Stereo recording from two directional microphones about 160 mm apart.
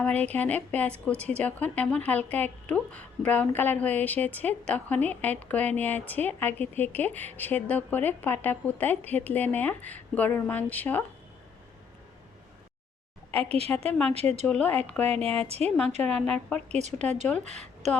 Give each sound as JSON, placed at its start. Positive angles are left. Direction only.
{"t": 0.0, "sound": "a woman's voice", "side_deg": 10}
{"t": 13.4, "sound": "a woman's voice", "side_deg": -40}
{"t": 14.4, "sound": "a woman's voice", "side_deg": 10}
{"t": 15.4, "sound": "a woman's voice", "side_deg": -40}
{"t": 16.0, "sound": "a woman's voice", "side_deg": 10}
{"t": 16.6, "sound": "speech", "side_deg": -45}